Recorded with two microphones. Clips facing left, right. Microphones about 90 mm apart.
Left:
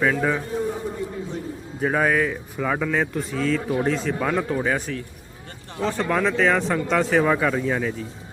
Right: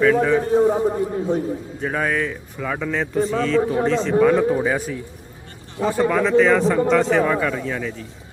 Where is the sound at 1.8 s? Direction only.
5° left (ahead or behind).